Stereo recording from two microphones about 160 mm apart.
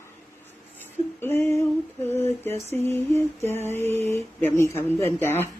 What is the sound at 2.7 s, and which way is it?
Speech, 15° left (ahead or behind).